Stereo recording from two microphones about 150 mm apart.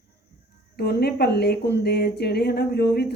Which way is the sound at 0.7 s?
90° left.